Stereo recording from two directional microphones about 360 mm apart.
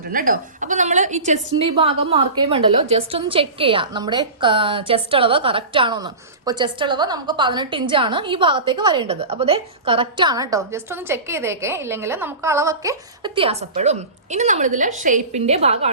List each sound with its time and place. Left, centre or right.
0.1 s a woman's voice: right